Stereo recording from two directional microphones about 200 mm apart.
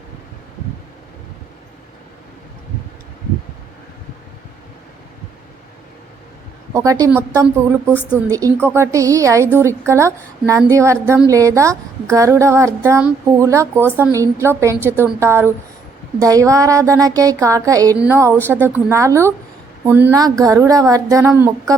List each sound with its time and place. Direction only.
7.0 s a woman's voice: 10° right (ahead or behind)